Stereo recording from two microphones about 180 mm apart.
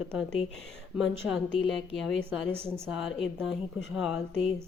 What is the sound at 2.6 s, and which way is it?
Speech, 15° right (ahead or behind).